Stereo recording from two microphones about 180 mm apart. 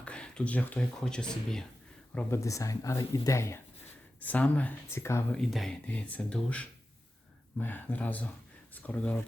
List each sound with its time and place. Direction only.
0.0 s speech: 5° left (ahead or behind)
2.1 s speech: 15° left (ahead or behind)
5.4 s speech: centre (ahead or behind)